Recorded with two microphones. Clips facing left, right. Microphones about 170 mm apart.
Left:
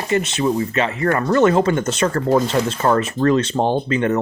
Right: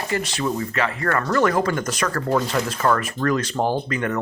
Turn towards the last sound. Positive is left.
turn(degrees=25)  # may be behind; listen again after turning